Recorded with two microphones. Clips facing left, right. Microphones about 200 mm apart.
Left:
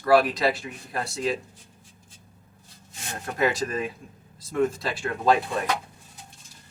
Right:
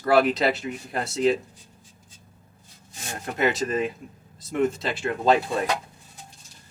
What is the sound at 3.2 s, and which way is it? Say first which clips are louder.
Speech: right 1 dB; 20° right (ahead or behind).